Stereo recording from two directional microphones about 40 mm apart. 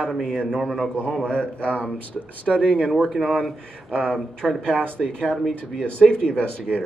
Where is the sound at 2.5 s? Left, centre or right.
Centre.